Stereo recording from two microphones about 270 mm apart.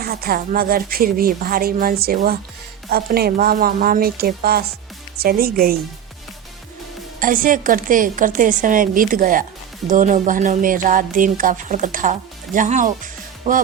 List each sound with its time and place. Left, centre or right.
0.0 s speech: right
7.2 s a woman's voice: right